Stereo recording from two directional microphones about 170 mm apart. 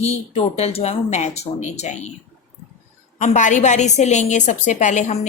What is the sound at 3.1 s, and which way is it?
A woman's voice, 45° left (ahead or behind).